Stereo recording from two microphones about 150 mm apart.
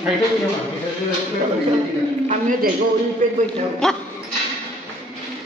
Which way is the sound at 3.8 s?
5° left (ahead or behind).